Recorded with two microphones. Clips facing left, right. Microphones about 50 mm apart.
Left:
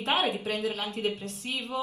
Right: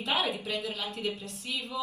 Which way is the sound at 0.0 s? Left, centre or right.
Left.